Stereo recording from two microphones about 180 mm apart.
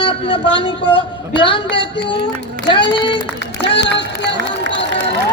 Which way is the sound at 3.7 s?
75° left (ahead or behind).